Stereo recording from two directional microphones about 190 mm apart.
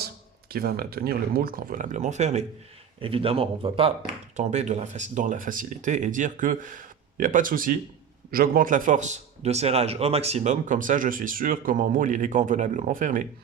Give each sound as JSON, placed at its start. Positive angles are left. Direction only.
{"t": 0.5, "sound": "a man's voice", "side_deg": -50}